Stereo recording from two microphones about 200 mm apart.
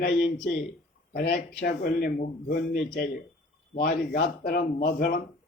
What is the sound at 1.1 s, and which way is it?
A man's voice, 50° left (ahead or behind).